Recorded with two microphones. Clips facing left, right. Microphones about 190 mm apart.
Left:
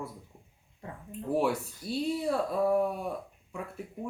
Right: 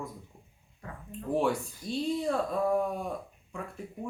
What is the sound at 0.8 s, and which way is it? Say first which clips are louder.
Speech: left 1 dB; 25° left (ahead or behind).